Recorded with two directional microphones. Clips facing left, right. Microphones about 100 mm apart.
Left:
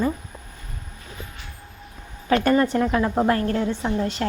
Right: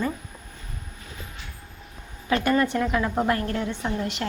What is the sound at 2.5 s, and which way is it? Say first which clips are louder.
A woman's voice: left 2 dB; 30° left (ahead or behind).